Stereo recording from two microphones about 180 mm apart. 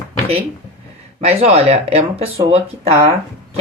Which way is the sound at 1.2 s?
35° right (ahead or behind).